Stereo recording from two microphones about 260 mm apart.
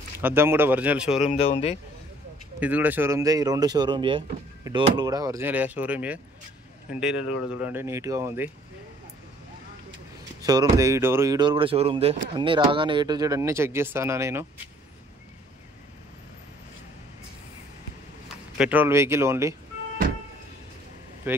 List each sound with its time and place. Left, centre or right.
0.2 s speech: centre
1.2 s speech: left
2.6 s speech: centre
10.4 s speech: centre
18.6 s speech: centre
21.3 s speech: centre